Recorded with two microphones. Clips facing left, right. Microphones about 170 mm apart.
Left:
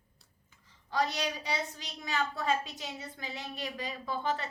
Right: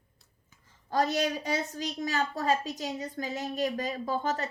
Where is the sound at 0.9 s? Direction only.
45° right (ahead or behind).